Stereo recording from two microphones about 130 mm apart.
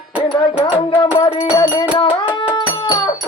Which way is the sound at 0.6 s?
40° left (ahead or behind).